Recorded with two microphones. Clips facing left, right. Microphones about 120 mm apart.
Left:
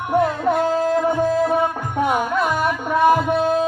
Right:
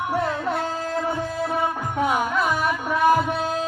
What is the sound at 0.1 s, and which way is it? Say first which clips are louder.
Music: left 8 dB; 45° left (ahead or behind).